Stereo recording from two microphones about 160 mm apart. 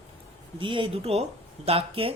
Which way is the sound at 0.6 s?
30° right (ahead or behind).